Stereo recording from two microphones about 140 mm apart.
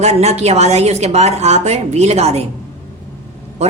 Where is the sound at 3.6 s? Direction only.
50° right (ahead or behind).